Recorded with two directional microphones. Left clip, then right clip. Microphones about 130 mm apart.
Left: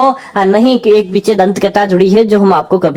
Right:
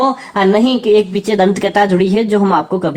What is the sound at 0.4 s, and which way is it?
Speech, 30° left (ahead or behind).